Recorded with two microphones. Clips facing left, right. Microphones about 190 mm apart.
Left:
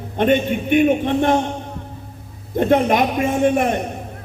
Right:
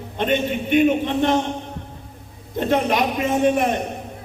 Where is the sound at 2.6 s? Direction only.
50° left (ahead or behind).